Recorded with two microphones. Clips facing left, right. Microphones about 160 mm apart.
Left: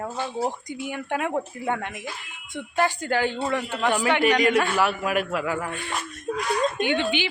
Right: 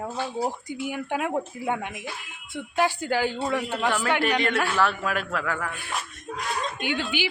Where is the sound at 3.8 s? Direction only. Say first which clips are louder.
Left 4 dB; 15° left (ahead or behind).